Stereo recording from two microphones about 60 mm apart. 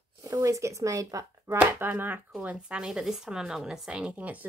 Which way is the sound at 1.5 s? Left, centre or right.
Right.